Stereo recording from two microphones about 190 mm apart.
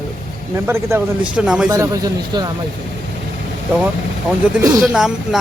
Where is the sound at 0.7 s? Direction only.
15° right (ahead or behind).